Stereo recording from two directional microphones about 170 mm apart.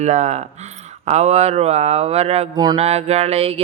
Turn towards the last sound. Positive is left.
turn(degrees=-35)  # may be behind; listen again after turning